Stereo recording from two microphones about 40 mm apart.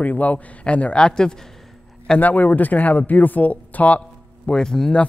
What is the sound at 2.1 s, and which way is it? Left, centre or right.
Speech, left.